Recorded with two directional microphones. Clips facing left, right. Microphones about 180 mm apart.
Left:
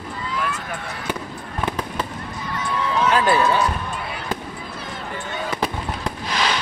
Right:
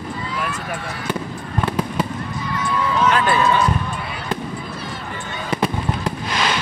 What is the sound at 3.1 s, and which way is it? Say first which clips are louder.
Run: even; 35° left (ahead or behind).